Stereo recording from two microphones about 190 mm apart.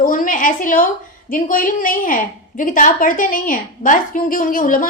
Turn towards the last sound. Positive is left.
turn(degrees=45)  # may be behind; listen again after turning